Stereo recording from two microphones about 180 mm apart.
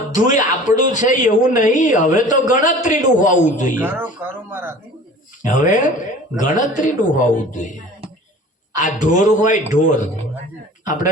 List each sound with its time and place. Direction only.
0.1 s a man's voice: 45° left (ahead or behind)
3.8 s speech: 10° right (ahead or behind)
5.4 s a man's voice: 45° left (ahead or behind)
8.7 s a man's voice: 45° left (ahead or behind)